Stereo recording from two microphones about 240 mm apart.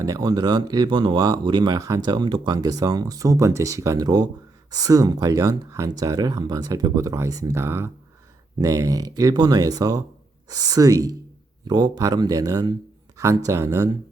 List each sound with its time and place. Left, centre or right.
0.0 s speech: centre